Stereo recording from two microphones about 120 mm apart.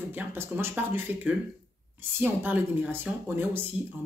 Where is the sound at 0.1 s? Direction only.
15° right (ahead or behind).